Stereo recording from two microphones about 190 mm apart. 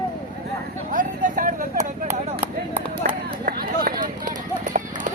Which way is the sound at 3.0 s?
45° right (ahead or behind).